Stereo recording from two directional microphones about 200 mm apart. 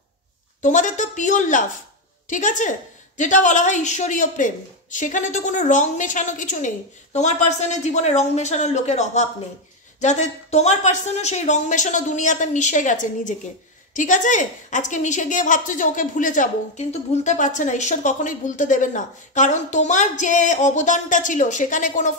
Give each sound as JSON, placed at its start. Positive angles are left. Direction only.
{"t": 0.6, "sound": "a woman's voice", "side_deg": 40}